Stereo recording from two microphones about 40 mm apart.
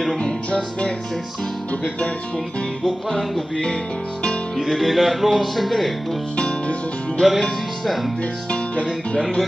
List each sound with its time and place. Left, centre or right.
0.2 s music: left
2.8 s music: centre
4.6 s speech: centre
6.3 s music: left